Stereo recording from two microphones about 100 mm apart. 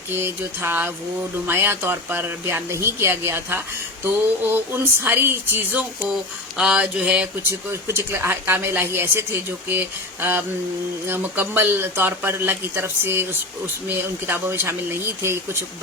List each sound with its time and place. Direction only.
0.1 s speech: 25° right (ahead or behind)
6.6 s a sound: 10° right (ahead or behind)
7.7 s speech: 25° right (ahead or behind)